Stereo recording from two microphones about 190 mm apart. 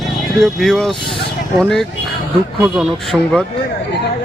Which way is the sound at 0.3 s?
Centre (ahead or behind).